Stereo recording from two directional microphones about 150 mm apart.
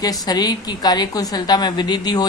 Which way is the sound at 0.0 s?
25° left (ahead or behind).